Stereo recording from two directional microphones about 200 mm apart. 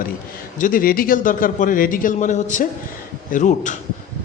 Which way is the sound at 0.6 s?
45° left (ahead or behind).